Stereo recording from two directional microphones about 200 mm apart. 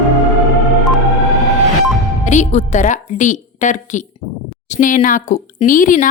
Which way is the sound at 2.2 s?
35° left (ahead or behind).